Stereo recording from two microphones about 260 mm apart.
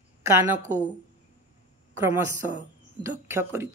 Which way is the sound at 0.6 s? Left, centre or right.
Right.